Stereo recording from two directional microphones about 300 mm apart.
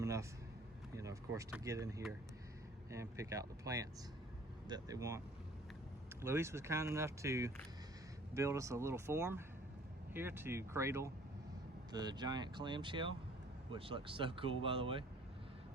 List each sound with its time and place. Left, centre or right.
0.0 s a sound: centre
0.9 s speech: centre
6.2 s speech: centre